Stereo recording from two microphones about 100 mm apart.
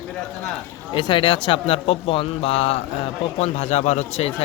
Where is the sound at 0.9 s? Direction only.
55° left (ahead or behind).